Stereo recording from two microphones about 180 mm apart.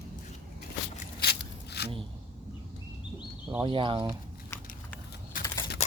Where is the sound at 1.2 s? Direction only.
65° left (ahead or behind).